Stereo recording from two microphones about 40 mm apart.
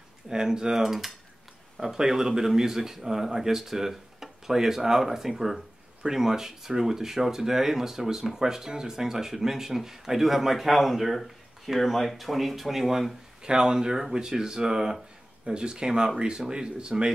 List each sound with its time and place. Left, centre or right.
0.3 s speech: centre
13.4 s speech: centre